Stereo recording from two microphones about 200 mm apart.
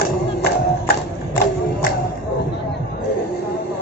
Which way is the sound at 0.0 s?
55° left (ahead or behind).